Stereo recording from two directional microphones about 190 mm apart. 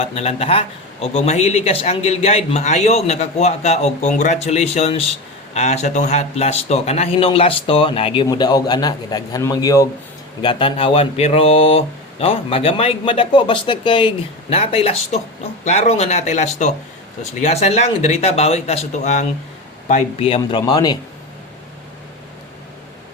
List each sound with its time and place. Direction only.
0.0 s a man's voice: 30° left (ahead or behind)